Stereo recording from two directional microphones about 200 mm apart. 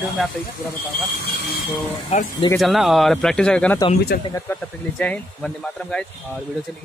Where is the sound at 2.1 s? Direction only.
35° left (ahead or behind).